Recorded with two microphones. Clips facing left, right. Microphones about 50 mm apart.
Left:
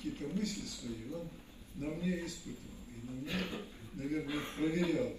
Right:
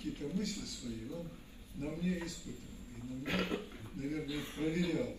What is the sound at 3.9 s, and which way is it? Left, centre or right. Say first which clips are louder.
A man's voice: left 2 dB; left.